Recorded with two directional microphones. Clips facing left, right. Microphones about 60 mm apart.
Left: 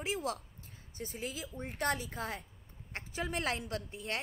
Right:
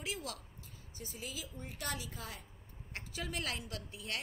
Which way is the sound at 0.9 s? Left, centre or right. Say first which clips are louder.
Left 5 dB; left.